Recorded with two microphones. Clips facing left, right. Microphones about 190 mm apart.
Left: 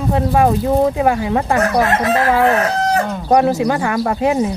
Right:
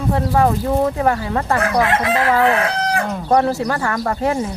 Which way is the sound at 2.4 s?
40° left (ahead or behind).